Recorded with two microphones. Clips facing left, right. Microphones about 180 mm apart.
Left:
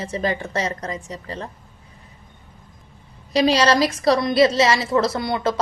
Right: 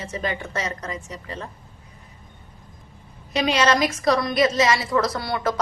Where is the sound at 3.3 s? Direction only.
35° left (ahead or behind).